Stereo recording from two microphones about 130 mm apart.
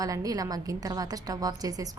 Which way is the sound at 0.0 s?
30° right (ahead or behind).